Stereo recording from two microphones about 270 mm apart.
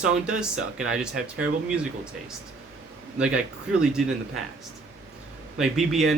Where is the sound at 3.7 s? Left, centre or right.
Centre.